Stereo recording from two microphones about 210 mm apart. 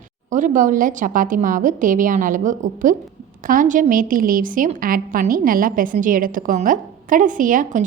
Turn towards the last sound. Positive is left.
turn(degrees=-40)  # may be behind; listen again after turning